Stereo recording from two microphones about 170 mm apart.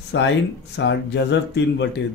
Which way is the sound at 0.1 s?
90° left.